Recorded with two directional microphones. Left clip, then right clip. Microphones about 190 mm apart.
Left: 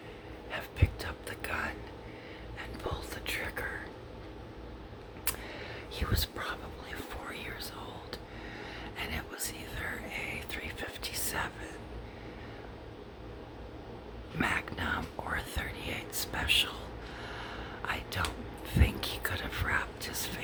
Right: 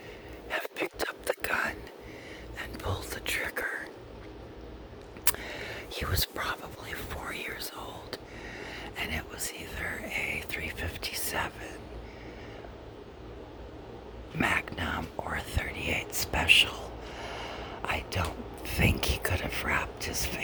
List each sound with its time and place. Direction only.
0.5 s whispering: 45° right (ahead or behind)
5.2 s whispering: 45° right (ahead or behind); by 11.7 s 25° right (ahead or behind)
14.3 s whispering: 30° right (ahead or behind)